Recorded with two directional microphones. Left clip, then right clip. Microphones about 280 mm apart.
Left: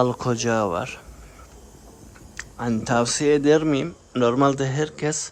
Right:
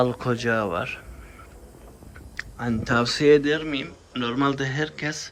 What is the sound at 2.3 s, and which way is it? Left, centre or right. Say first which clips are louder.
Speech: left 2 dB; centre.